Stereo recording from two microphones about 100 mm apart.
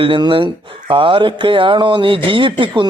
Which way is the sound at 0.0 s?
55° right (ahead or behind).